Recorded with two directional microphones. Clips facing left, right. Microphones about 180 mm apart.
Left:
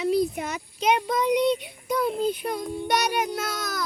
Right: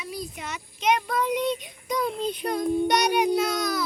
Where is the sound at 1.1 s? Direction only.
15° left (ahead or behind).